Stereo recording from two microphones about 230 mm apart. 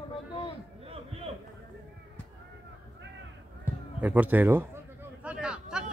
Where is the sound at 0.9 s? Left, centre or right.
Right.